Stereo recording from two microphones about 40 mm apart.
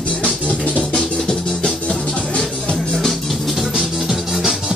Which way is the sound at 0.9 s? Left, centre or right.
Centre.